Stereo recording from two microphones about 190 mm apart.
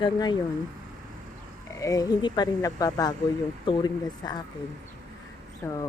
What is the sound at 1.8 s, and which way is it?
Speech, 20° left (ahead or behind).